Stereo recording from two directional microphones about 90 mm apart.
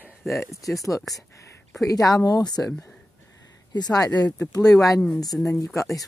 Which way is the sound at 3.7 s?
45° left (ahead or behind).